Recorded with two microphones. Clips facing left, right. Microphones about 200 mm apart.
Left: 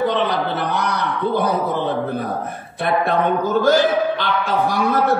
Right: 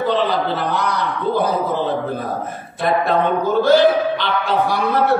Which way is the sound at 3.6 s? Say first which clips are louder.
Right 3 dB; 45° left (ahead or behind).